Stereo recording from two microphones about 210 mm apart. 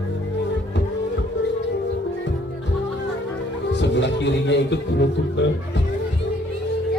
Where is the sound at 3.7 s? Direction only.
55° left (ahead or behind).